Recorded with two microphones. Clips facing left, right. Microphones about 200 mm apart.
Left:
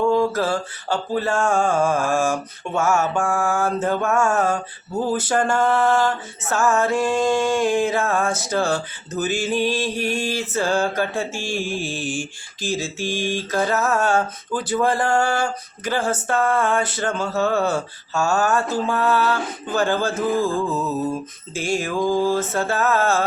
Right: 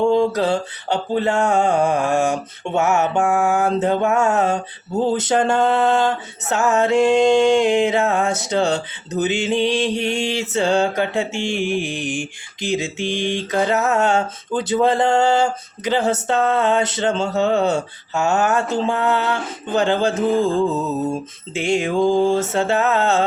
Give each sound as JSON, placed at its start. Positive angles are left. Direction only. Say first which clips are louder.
{"t": 0.0, "sound": "mantra", "louder": "right 2 dB", "side_deg": -25}